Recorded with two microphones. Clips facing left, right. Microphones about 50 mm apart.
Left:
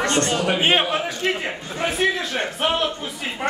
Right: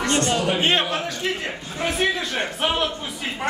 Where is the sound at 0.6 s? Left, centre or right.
Centre.